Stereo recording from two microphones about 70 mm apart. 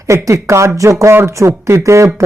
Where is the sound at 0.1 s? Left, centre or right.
Right.